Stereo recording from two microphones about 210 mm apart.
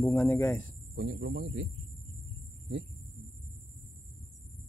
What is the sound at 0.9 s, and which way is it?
Speech, 55° right (ahead or behind).